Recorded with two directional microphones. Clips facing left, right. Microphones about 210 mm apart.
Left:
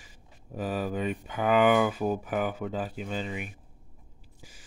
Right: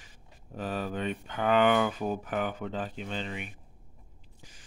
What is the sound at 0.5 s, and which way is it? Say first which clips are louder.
Speech: left 3 dB; 10° left (ahead or behind).